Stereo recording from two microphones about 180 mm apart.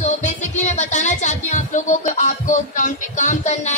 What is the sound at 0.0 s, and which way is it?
Music, 40° left (ahead or behind).